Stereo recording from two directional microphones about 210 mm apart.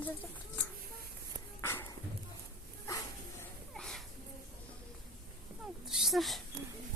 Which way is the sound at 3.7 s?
5° left (ahead or behind).